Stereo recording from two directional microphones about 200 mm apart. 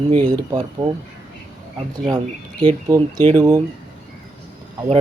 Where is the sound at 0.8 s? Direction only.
30° right (ahead or behind).